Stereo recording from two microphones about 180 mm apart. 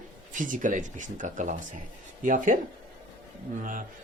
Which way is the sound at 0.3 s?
45° right (ahead or behind).